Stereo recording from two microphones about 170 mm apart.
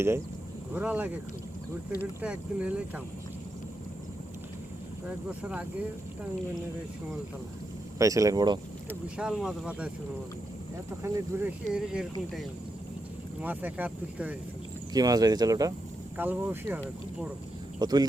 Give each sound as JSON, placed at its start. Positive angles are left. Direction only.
{"t": 0.7, "sound": "speech", "side_deg": -10}
{"t": 5.3, "sound": "speech", "side_deg": -5}
{"t": 7.9, "sound": "speech", "side_deg": -20}
{"t": 9.1, "sound": "speech", "side_deg": -5}
{"t": 11.0, "sound": "speech", "side_deg": -10}
{"t": 13.4, "sound": "speech", "side_deg": -10}
{"t": 14.9, "sound": "speech", "side_deg": -20}
{"t": 17.7, "sound": "speech", "side_deg": -25}